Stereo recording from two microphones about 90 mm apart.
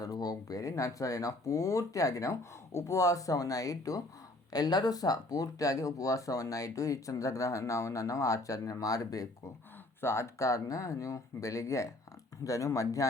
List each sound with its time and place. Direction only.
0.0 s speech: 45° left (ahead or behind)
10.0 s speech: 30° left (ahead or behind)